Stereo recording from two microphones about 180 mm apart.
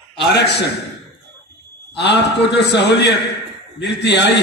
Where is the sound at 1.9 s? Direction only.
70° left (ahead or behind).